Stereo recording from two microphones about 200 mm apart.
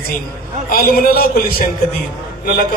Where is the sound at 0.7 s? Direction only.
50° left (ahead or behind).